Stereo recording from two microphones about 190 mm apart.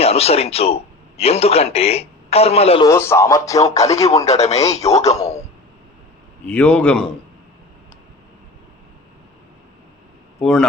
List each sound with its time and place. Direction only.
0.0 s a man's voice: 30° left (ahead or behind)
2.8 s speech: 15° left (ahead or behind)
3.6 s a man's voice: 35° left (ahead or behind)
6.4 s a man's voice: 5° left (ahead or behind)
10.4 s a man's voice: 5° left (ahead or behind)